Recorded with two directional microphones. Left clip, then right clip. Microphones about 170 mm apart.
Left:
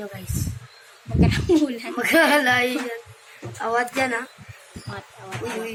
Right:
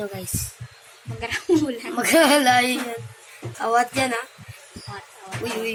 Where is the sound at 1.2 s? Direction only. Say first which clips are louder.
Left 1 dB; 50° left (ahead or behind).